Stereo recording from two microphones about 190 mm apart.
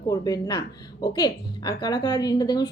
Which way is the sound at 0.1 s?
20° left (ahead or behind).